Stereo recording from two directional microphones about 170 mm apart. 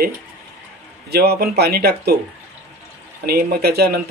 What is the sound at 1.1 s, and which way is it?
Speech, 70° right (ahead or behind).